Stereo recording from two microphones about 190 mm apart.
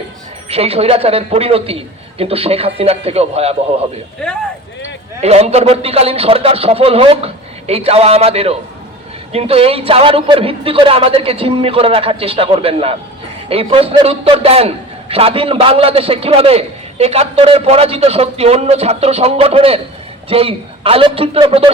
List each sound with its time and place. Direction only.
0.4 s a man's voice: 30° right (ahead or behind)
5.2 s a man's voice: 35° right (ahead or behind)